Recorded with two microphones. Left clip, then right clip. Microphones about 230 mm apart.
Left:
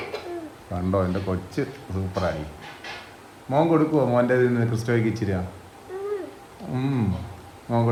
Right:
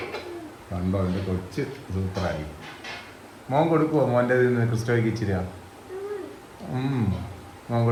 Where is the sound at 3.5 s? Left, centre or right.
Left.